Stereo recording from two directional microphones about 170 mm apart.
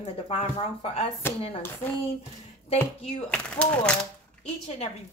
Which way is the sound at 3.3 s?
5° left (ahead or behind).